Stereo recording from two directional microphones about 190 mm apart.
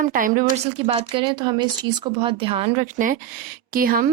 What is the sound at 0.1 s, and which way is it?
Speech, 45° right (ahead or behind).